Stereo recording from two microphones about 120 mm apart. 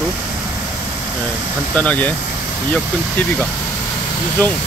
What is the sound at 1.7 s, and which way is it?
Speech, 10° left (ahead or behind).